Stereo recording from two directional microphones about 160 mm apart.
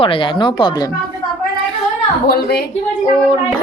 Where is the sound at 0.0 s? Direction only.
35° left (ahead or behind).